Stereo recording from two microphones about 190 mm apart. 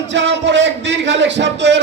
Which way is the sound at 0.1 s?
70° right (ahead or behind).